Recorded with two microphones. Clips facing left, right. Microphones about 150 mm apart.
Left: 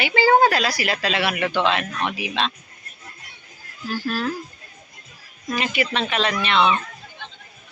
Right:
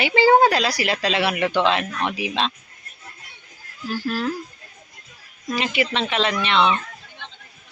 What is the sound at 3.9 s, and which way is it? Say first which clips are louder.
Speech: even; 10° right (ahead or behind).